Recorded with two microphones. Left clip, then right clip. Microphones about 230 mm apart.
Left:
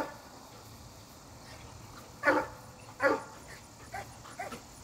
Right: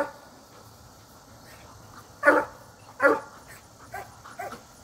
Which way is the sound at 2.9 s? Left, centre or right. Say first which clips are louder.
Right 7 dB; right.